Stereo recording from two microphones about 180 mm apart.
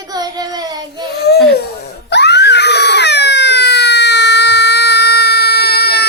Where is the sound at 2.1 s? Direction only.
70° left (ahead or behind).